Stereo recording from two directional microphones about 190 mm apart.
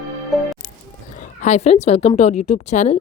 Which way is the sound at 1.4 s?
35° left (ahead or behind).